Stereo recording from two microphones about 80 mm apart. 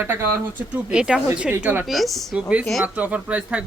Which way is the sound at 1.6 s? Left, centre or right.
Right.